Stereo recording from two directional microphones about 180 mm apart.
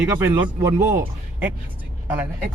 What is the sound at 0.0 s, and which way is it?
Speech, 10° right (ahead or behind).